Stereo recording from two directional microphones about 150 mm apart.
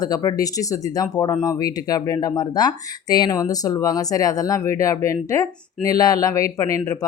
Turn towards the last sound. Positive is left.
turn(degrees=20)  # may be behind; listen again after turning